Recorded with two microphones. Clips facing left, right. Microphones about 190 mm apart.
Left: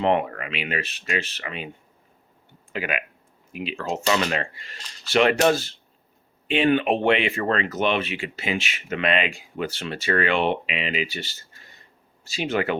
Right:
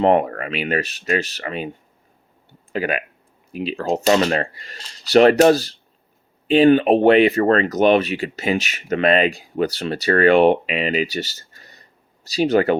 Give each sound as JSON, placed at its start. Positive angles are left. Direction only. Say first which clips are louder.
{"t": 0.0, "sound": "speech", "louder": "right 6 dB", "side_deg": -45}
{"t": 2.7, "sound": "speech", "louder": "right 6 dB", "side_deg": -35}